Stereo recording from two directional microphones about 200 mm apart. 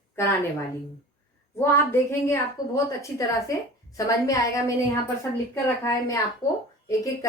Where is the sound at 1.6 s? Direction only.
10° left (ahead or behind).